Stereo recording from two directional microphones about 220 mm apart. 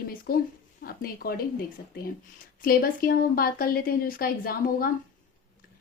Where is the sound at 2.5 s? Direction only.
40° left (ahead or behind).